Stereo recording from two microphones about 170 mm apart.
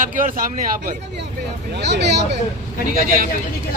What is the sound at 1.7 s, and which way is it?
Speech, 85° right.